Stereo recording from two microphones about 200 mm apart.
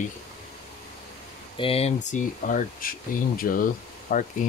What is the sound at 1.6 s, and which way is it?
Speech, 30° left (ahead or behind).